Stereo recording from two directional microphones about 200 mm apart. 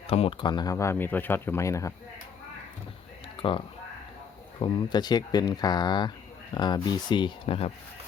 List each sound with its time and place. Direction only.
0.1 s speech: 30° left (ahead or behind)
3.3 s speech: 25° left (ahead or behind)
4.6 s speech: 20° left (ahead or behind)